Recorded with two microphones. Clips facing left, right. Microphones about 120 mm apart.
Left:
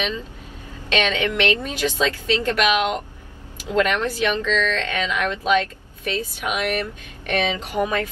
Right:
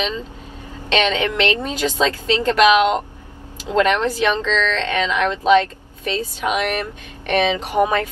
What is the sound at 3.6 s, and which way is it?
A woman's voice, 20° right (ahead or behind).